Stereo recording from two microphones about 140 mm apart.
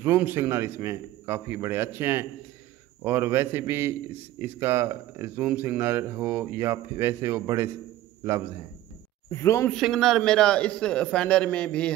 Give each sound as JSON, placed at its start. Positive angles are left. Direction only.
{"t": 0.0, "sound": "a man's voice", "side_deg": -15}
{"t": 9.3, "sound": "speech", "side_deg": 20}
{"t": 9.7, "sound": "a man's voice", "side_deg": 0}